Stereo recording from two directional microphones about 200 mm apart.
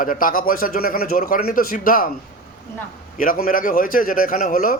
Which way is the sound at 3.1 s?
45° left (ahead or behind).